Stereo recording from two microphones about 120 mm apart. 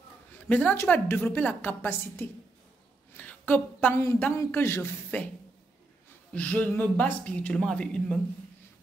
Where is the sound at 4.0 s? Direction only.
20° left (ahead or behind).